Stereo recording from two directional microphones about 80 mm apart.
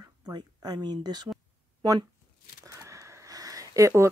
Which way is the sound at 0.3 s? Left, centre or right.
Right.